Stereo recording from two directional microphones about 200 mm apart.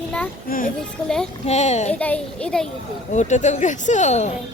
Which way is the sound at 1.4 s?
35° left (ahead or behind).